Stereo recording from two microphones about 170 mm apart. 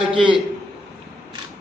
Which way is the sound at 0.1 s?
30° right (ahead or behind).